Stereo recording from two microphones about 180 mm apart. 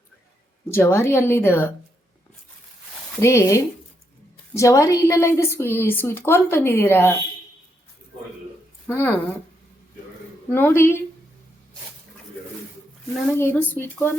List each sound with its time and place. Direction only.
0.7 s a woman's voice: 15° left (ahead or behind)
3.2 s a woman's voice: 15° left (ahead or behind)
8.9 s a woman's voice: 10° left (ahead or behind)
10.5 s a woman's voice: 10° left (ahead or behind)
13.3 s a woman's voice: 10° left (ahead or behind)